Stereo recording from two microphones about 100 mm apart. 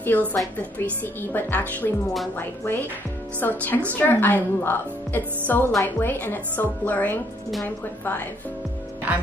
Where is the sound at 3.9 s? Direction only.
20° left (ahead or behind).